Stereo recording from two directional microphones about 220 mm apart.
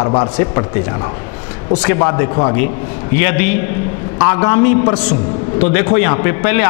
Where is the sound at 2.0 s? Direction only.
20° left (ahead or behind).